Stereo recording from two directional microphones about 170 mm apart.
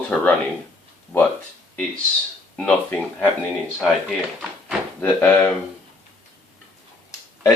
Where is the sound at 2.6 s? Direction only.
5° left (ahead or behind).